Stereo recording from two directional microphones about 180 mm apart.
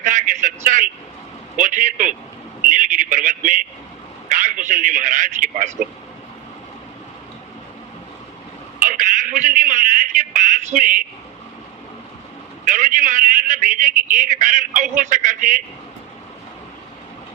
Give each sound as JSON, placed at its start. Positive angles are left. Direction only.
{"t": 0.0, "sound": "a sound", "side_deg": -45}
{"t": 1.5, "sound": "a man's voice", "side_deg": -45}
{"t": 2.6, "sound": "a sound", "side_deg": -50}
{"t": 4.3, "sound": "a man's voice", "side_deg": -45}
{"t": 8.8, "sound": "a man's voice", "side_deg": -45}
{"t": 12.6, "sound": "a man's voice", "side_deg": -45}